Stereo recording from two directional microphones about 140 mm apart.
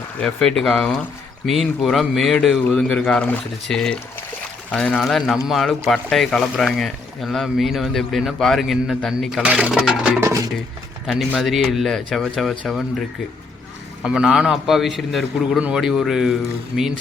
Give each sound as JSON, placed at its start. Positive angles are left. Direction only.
{"t": 0.2, "sound": "a man's voice", "side_deg": 5}
{"t": 9.4, "sound": "speech", "side_deg": -10}
{"t": 10.2, "sound": "music", "side_deg": -25}
{"t": 11.0, "sound": "speech", "side_deg": 0}
{"t": 14.0, "sound": "speech", "side_deg": -5}